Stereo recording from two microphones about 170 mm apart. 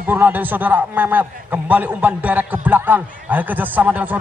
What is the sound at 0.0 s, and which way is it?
A man's voice, 10° right (ahead or behind).